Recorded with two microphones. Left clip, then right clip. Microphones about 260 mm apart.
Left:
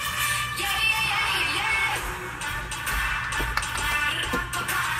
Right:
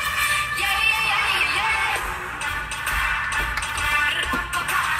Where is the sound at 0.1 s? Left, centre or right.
Right.